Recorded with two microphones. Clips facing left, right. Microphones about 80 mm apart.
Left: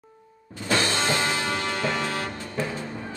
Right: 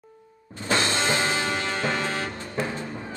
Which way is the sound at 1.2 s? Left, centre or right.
Right.